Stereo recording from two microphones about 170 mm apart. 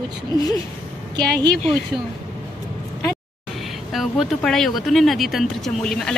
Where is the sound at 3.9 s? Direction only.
Centre (ahead or behind).